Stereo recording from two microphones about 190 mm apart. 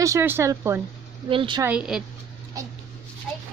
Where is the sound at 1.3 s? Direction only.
25° right (ahead or behind).